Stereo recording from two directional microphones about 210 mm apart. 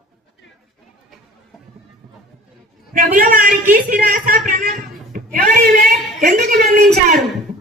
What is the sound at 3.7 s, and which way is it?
Speech, 40° right (ahead or behind).